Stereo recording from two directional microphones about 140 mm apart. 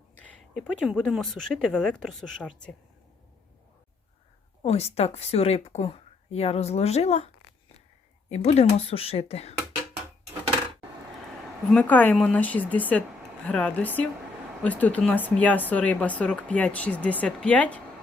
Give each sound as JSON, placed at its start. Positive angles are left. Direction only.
{"t": 0.7, "sound": "a woman's voice", "side_deg": -5}
{"t": 4.6, "sound": "speech", "side_deg": 45}
{"t": 8.3, "sound": "speech", "side_deg": 50}
{"t": 11.7, "sound": "a woman's voice", "side_deg": 10}